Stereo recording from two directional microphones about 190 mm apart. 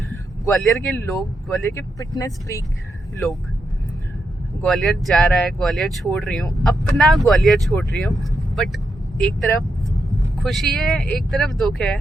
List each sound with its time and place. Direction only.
0.4 s speech: 10° left (ahead or behind)
1.7 s speech: 15° left (ahead or behind)
4.6 s speech: centre (ahead or behind)